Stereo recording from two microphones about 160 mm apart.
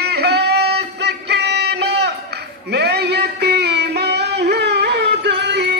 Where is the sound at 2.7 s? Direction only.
90° right.